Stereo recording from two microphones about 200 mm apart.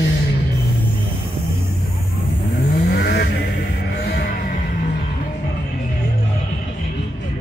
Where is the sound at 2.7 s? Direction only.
50° left (ahead or behind).